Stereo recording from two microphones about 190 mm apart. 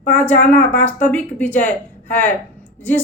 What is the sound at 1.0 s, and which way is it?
Speech, 10° left (ahead or behind).